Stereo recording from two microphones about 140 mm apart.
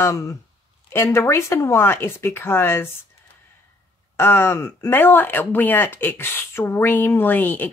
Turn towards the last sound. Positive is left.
turn(degrees=15)  # may be behind; listen again after turning